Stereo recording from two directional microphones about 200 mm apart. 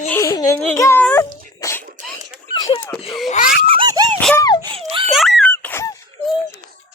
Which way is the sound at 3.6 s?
25° right (ahead or behind).